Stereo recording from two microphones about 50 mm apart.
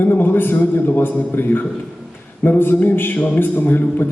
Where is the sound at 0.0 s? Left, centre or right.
Left.